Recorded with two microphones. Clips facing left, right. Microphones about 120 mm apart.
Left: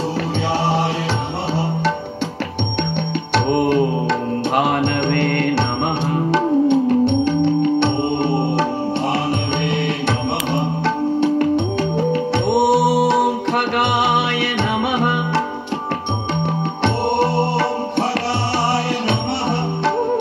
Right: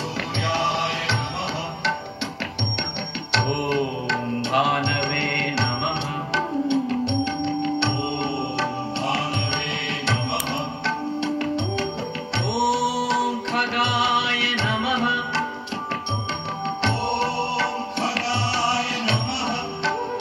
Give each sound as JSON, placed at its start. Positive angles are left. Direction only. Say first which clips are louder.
{"t": 3.3, "sound": "music", "louder": "left 7 dB", "side_deg": 50}
{"t": 11.1, "sound": "music", "louder": "left 10 dB", "side_deg": 50}